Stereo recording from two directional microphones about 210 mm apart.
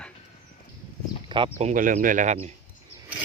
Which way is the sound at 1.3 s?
25° right (ahead or behind).